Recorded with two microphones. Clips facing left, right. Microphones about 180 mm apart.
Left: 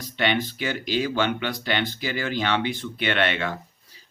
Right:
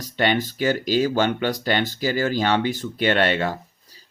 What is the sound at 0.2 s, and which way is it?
Speech, 40° right (ahead or behind).